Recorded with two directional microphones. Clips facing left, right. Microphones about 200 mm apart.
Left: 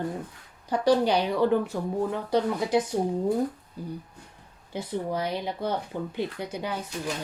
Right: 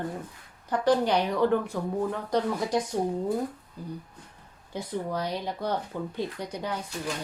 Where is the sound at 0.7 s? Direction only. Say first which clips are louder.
Left 2 dB; 10° left (ahead or behind).